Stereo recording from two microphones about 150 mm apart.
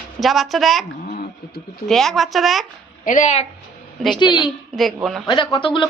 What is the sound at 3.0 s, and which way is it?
Speech, 60° left (ahead or behind).